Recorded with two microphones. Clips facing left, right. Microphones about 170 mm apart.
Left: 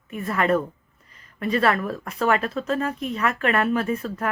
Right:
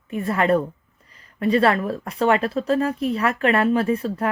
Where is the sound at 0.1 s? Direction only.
30° right (ahead or behind).